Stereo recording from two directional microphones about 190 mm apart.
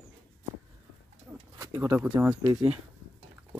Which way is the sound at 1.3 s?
15° right (ahead or behind).